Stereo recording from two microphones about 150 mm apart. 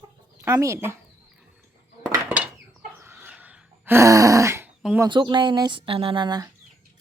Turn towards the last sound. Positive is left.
turn(degrees=-30)  # may be behind; listen again after turning